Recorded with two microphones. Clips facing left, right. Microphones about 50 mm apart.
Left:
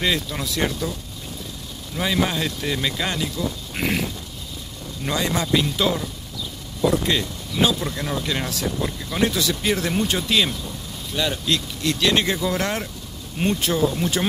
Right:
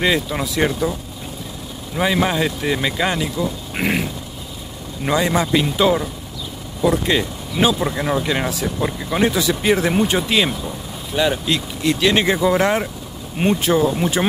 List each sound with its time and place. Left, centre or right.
0.0 s speech: centre
2.0 s speech: centre
5.0 s speech: centre
7.1 s speech: centre